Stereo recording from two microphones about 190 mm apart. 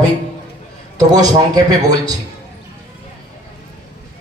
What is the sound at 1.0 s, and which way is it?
A man's voice, 20° right (ahead or behind).